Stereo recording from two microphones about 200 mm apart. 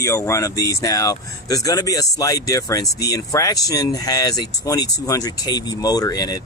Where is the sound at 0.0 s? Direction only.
15° left (ahead or behind).